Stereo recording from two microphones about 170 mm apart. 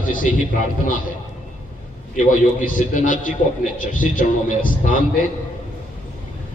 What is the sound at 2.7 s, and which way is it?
A man's voice, 50° left (ahead or behind).